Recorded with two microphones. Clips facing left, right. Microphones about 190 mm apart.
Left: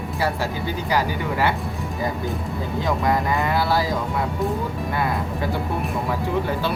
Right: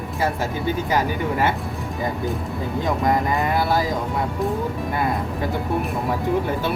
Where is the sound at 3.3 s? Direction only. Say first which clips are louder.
Right 1 dB; 20° right (ahead or behind).